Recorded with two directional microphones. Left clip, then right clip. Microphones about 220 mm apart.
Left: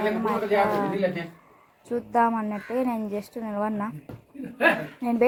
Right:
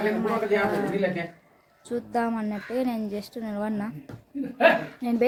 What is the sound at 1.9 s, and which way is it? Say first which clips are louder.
Speech: left 5 dB; 5° right (ahead or behind).